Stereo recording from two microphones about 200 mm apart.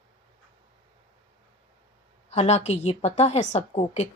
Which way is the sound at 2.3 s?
35° left (ahead or behind).